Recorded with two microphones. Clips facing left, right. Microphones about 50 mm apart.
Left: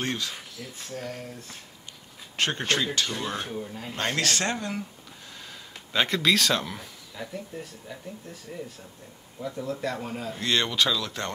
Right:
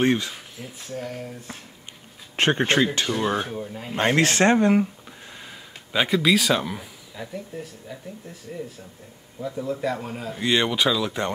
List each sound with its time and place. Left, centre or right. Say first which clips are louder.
0.0 s speech: right 9 dB; right
0.7 s speech: right 4 dB; centre
2.3 s speech: right 6 dB; right; by 3.9 s centre
3.9 s speech: right 7 dB; right
5.9 s speech: right 3 dB; centre